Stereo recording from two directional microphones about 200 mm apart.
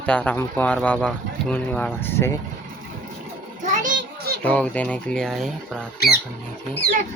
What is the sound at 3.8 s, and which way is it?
Children playing, 40° right (ahead or behind).